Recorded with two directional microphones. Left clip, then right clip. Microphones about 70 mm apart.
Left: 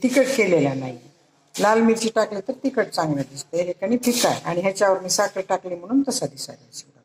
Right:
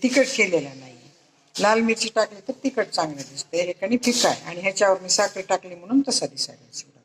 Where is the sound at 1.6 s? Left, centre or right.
Left.